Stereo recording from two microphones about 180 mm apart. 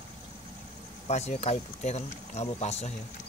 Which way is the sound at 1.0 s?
35° left (ahead or behind).